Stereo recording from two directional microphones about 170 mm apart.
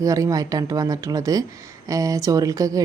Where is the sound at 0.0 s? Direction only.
20° right (ahead or behind).